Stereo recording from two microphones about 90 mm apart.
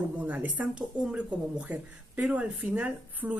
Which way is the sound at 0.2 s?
15° right (ahead or behind).